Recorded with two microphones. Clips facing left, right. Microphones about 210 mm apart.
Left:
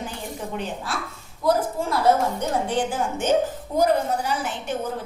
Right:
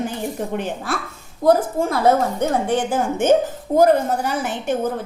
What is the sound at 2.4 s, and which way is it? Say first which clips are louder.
A woman's voice: right 4 dB; 50° right (ahead or behind).